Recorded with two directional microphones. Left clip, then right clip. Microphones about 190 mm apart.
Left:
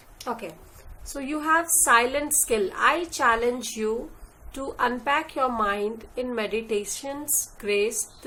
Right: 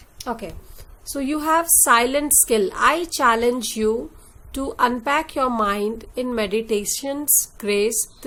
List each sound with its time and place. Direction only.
0.3 s a woman's voice: 45° right (ahead or behind)